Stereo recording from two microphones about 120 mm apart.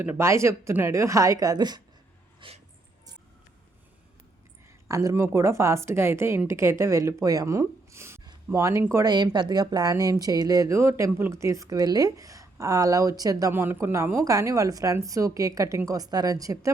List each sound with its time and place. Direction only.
0.0 s speech: 20° right (ahead or behind); by 2.6 s 45° right (ahead or behind)
4.9 s speech: 30° right (ahead or behind)
9.0 s speech: 35° right (ahead or behind)
13.5 s a woman's voice: 20° right (ahead or behind)